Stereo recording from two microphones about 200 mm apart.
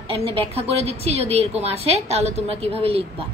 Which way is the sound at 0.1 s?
30° right (ahead or behind).